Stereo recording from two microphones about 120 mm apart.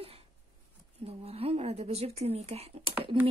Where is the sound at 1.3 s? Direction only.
60° right (ahead or behind).